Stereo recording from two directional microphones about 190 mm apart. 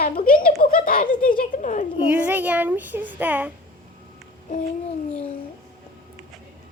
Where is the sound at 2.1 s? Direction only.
10° right (ahead or behind).